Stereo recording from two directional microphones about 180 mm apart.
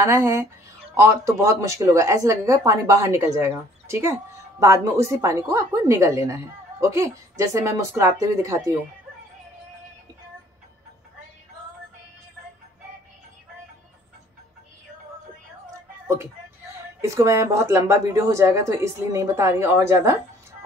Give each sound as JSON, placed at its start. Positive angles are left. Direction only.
{"t": 0.0, "sound": "speech", "side_deg": -15}
{"t": 17.0, "sound": "speech", "side_deg": -15}